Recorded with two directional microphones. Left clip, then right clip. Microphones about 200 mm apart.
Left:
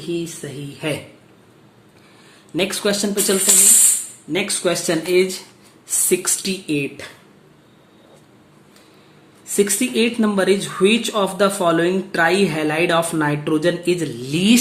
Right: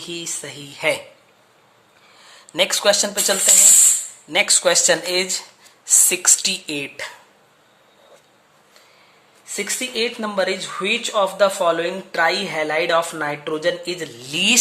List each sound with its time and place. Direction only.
0.1 s a woman's voice: 45° right (ahead or behind)
2.6 s a woman's voice: 35° right (ahead or behind)
9.5 s speech: 15° right (ahead or behind)
14.3 s speech: 25° right (ahead or behind)